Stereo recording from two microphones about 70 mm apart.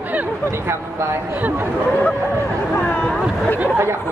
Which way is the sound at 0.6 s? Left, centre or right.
Right.